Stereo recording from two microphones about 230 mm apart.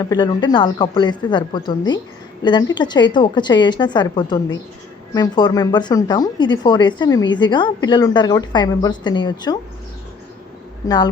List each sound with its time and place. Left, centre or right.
0.0 s a woman's voice: centre
10.8 s a woman's voice: centre